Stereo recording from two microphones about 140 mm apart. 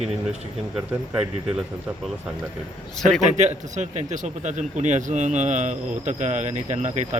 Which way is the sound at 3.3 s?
55° right (ahead or behind).